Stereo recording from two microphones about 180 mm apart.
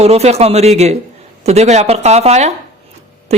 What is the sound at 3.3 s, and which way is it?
Owl, 35° right (ahead or behind).